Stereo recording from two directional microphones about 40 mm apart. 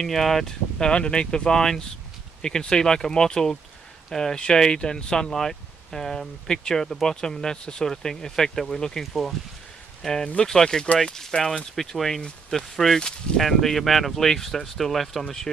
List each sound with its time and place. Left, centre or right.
0.0 s speech: centre; by 1.6 s left
1.6 s speech: centre
10.4 s speech: centre